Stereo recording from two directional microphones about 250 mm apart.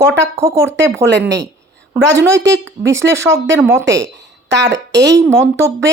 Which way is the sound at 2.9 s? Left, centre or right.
Centre.